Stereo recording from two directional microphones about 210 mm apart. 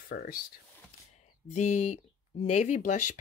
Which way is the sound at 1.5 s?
35° left (ahead or behind).